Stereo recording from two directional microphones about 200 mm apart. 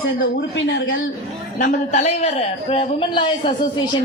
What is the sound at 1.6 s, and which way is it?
A woman's voice, 35° left (ahead or behind).